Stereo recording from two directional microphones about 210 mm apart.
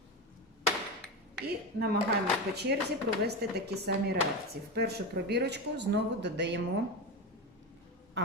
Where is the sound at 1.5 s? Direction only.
50° right (ahead or behind).